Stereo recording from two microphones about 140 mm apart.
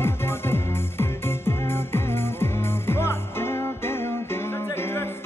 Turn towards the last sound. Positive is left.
turn(degrees=15)  # may be behind; listen again after turning